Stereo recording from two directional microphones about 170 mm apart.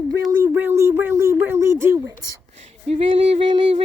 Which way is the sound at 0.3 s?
15° right (ahead or behind).